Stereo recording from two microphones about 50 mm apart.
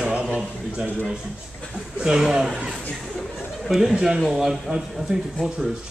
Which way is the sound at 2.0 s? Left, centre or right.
Centre.